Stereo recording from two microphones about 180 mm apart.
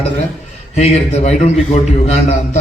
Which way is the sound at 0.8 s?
40° left (ahead or behind).